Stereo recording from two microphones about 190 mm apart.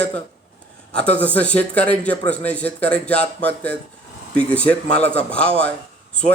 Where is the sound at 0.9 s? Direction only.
5° left (ahead or behind).